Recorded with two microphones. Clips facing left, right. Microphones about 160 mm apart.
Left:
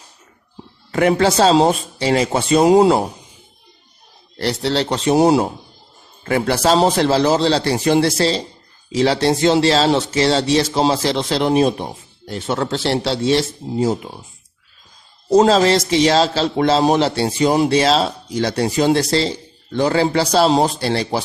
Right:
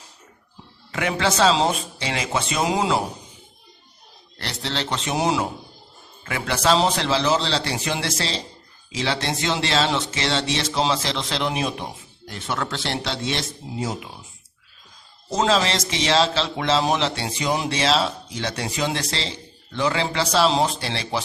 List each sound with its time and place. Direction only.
0.9 s speech: 40° left (ahead or behind)
4.4 s speech: 35° left (ahead or behind)
15.3 s speech: 40° left (ahead or behind)